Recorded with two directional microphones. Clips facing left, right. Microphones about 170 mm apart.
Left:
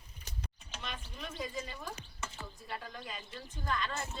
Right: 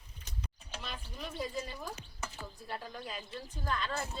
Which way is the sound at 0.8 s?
5° right (ahead or behind).